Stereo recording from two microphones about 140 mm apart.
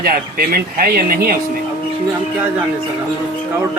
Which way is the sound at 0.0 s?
90° right.